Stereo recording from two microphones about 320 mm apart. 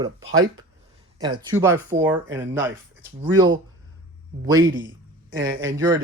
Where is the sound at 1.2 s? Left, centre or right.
Centre.